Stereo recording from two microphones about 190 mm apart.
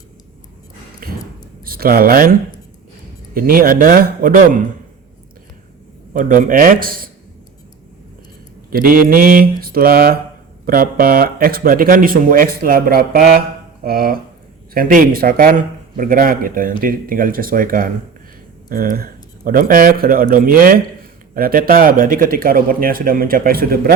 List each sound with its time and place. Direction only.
1.0 s a sound: 50° right (ahead or behind)
1.6 s a man's voice: 50° right (ahead or behind)
6.1 s a man's voice: 45° right (ahead or behind)
8.7 s a man's voice: 50° right (ahead or behind)